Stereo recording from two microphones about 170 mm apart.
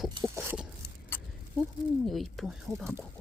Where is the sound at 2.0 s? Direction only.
Centre (ahead or behind).